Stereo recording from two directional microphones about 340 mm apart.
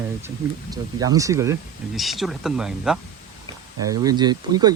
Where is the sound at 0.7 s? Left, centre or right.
Centre.